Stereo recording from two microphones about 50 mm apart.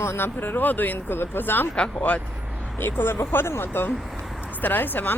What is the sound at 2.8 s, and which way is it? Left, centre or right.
Speech, left.